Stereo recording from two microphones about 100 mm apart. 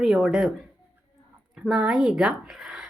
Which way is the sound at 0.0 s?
5° right (ahead or behind).